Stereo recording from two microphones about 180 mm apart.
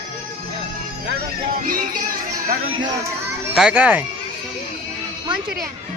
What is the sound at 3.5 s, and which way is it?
Speech, 5° right (ahead or behind).